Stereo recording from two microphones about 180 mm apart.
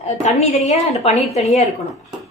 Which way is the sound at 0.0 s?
40° left (ahead or behind).